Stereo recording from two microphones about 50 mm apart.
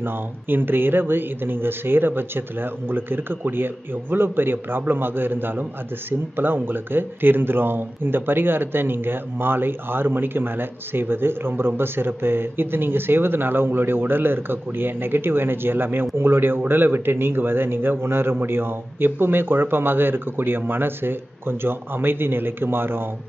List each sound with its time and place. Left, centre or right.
0.0 s speech: right